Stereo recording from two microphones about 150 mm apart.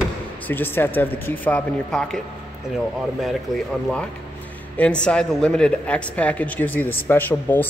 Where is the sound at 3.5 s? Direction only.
Centre (ahead or behind).